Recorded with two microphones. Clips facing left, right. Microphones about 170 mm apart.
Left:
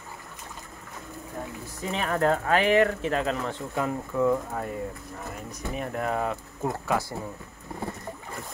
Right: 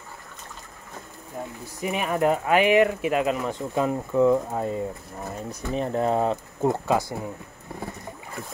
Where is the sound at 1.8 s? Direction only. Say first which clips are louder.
Right 2 dB; 15° right (ahead or behind).